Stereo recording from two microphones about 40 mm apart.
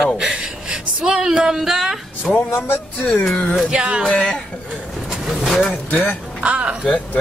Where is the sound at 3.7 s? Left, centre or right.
Right.